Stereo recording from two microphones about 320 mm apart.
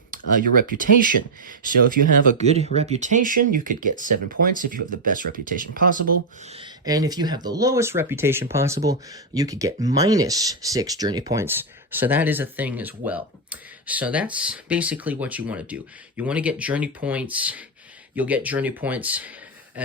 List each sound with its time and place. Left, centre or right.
0.5 s speech: right
6.5 s speech: centre